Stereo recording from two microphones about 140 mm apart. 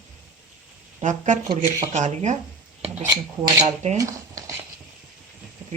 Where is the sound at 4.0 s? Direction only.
25° right (ahead or behind).